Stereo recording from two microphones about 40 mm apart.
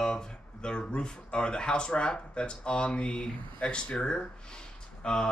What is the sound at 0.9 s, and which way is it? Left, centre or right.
Speech, left.